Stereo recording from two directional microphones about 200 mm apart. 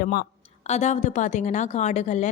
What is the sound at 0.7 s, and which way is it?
Speech, 35° left (ahead or behind).